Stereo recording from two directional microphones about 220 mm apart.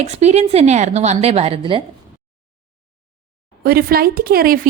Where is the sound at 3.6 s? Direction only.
45° right (ahead or behind).